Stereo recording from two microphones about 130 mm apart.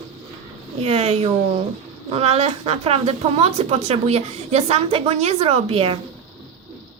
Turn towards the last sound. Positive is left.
turn(degrees=-50)  # may be behind; listen again after turning